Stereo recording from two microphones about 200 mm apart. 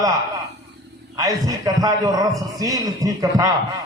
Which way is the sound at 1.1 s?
15° right (ahead or behind).